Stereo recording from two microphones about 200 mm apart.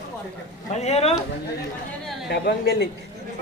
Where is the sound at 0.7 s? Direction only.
30° left (ahead or behind).